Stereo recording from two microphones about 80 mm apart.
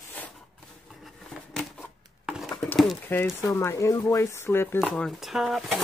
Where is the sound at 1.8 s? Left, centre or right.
Centre.